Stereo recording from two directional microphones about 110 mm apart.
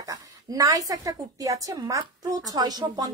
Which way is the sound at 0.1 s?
30° right (ahead or behind).